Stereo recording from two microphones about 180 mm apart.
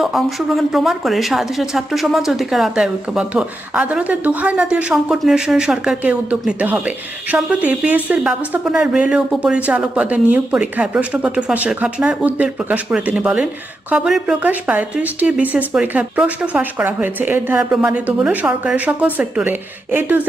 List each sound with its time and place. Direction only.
0.0 s a woman's voice: centre (ahead or behind)